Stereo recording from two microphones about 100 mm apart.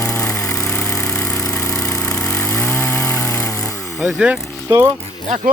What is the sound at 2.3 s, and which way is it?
Chainsaw, 30° left (ahead or behind).